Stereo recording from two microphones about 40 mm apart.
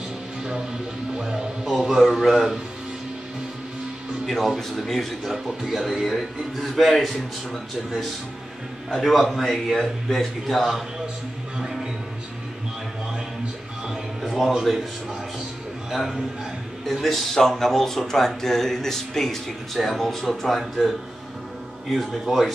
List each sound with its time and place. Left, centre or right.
0.4 s music: right
1.1 s speech: centre
4.6 s speech: centre
8.9 s speech: centre
14.2 s a sound: centre
15.9 s a man's voice: centre